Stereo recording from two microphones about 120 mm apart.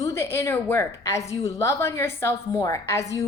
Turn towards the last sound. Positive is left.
turn(degrees=25)  # may be behind; listen again after turning